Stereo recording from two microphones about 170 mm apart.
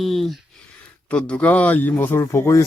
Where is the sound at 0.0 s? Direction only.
Centre (ahead or behind).